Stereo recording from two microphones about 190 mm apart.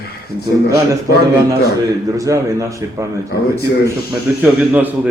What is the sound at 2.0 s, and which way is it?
Speech, 15° right (ahead or behind).